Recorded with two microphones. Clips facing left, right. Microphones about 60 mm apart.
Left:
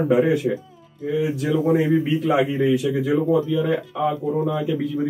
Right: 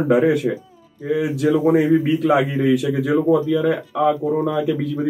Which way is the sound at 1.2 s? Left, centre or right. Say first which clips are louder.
Right 3 dB; right.